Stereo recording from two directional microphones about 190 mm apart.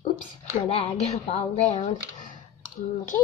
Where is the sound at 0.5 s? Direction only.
30° left (ahead or behind).